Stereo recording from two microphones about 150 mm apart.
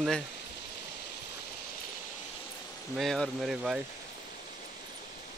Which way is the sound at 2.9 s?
Centre (ahead or behind).